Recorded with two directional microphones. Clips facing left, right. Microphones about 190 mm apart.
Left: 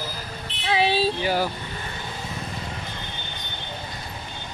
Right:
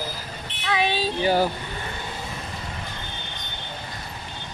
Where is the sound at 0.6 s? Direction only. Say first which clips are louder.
Left 2 dB; 30° left (ahead or behind).